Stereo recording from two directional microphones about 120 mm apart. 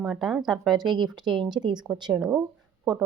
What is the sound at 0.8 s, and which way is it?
Speech, 40° right (ahead or behind).